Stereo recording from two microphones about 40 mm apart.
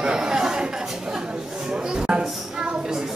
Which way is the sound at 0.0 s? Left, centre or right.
Centre.